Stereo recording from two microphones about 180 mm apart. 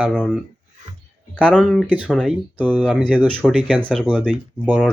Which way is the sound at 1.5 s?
Centre (ahead or behind).